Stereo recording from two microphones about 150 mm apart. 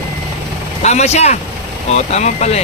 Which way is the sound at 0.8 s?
50° left (ahead or behind).